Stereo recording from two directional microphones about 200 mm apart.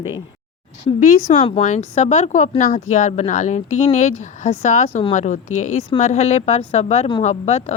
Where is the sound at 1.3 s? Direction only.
35° left (ahead or behind).